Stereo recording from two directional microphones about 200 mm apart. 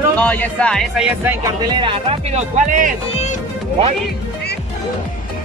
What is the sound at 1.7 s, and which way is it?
Speech, 25° right (ahead or behind).